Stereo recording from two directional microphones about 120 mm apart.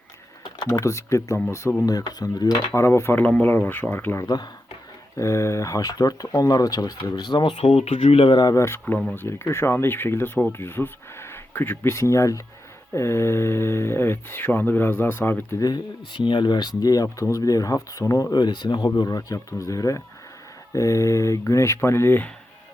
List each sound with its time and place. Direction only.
0.7 s speech: 25° left (ahead or behind)
2.7 s speech: 20° left (ahead or behind); by 7.5 s 40° left (ahead or behind)
7.5 s speech: 60° left (ahead or behind)
8.4 s speech: 30° left (ahead or behind)
15.6 s speech: 40° left (ahead or behind); by 22.3 s 20° left (ahead or behind)